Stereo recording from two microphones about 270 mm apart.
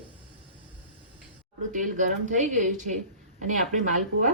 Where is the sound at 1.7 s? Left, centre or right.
Right.